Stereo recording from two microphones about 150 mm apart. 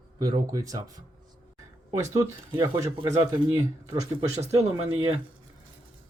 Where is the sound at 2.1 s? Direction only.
20° right (ahead or behind).